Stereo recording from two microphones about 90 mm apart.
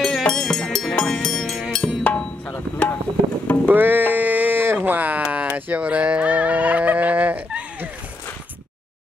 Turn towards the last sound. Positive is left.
turn(degrees=-15)  # may be behind; listen again after turning